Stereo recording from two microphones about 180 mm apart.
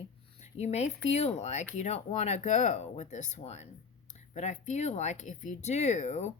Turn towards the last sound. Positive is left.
turn(degrees=40)  # may be behind; listen again after turning